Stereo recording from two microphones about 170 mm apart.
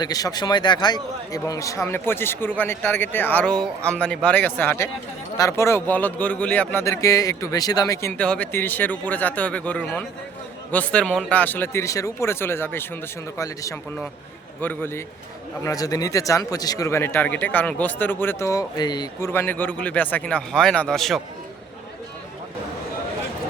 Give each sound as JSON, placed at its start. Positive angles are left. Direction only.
{"t": 0.0, "sound": "speech", "side_deg": 20}
{"t": 8.2, "sound": "speech", "side_deg": 10}
{"t": 19.3, "sound": "speech", "side_deg": 10}